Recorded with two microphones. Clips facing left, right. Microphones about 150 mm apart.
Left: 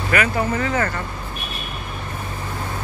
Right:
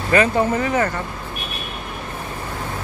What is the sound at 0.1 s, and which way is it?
Speech, 20° right (ahead or behind).